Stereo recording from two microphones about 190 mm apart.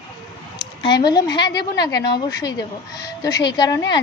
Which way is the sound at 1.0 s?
20° left (ahead or behind).